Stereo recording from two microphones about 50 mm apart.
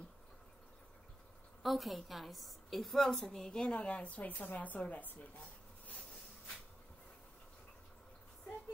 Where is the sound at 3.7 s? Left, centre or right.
Left.